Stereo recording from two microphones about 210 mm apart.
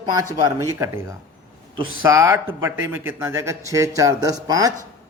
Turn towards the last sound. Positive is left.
turn(degrees=-15)  # may be behind; listen again after turning